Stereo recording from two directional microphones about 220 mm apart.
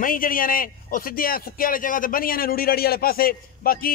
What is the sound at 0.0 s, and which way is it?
A man's voice, 40° left (ahead or behind).